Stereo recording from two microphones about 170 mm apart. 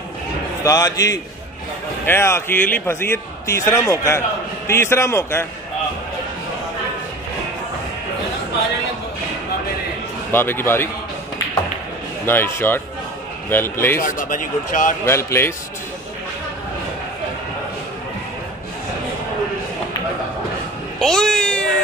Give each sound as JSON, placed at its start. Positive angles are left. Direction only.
{"t": 0.7, "sound": "a man's voice", "side_deg": 20}
{"t": 10.3, "sound": "a man's voice", "side_deg": 15}
{"t": 12.3, "sound": "a man's voice", "side_deg": 15}
{"t": 14.0, "sound": "speech", "side_deg": 50}
{"t": 15.0, "sound": "a man's voice", "side_deg": 15}
{"t": 21.0, "sound": "cat", "side_deg": 5}